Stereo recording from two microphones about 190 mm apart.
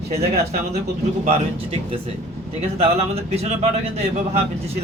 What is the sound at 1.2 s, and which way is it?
Speech, 30° right (ahead or behind).